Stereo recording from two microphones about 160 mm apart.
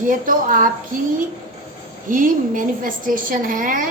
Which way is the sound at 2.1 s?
55° right (ahead or behind).